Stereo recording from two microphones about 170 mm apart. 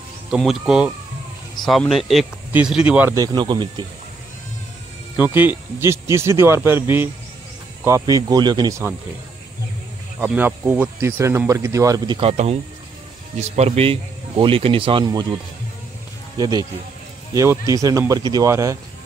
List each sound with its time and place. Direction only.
0.3 s speech: centre (ahead or behind)
3.2 s speech: 25° right (ahead or behind)
5.1 s speech: 10° right (ahead or behind)
10.2 s speech: 10° right (ahead or behind)
12.2 s speech: 35° right (ahead or behind)
16.3 s speech: 20° right (ahead or behind)